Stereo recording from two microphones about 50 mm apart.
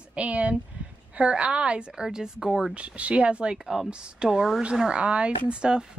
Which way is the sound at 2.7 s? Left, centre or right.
Right.